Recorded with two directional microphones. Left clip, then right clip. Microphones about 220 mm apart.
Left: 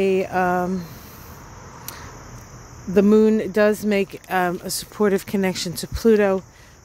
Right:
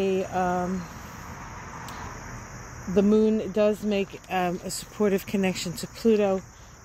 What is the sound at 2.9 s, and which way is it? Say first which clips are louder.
Speech: left 6 dB; 35° left (ahead or behind).